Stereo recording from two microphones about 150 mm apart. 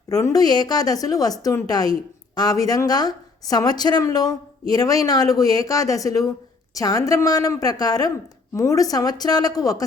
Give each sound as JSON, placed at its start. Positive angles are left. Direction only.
{"t": 0.1, "sound": "a woman's voice", "side_deg": 20}